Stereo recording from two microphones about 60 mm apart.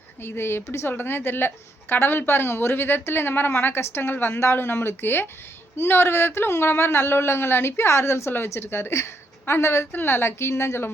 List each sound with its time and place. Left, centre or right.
0.2 s a woman's voice: left